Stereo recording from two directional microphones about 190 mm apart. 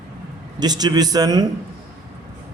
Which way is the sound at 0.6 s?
20° right (ahead or behind).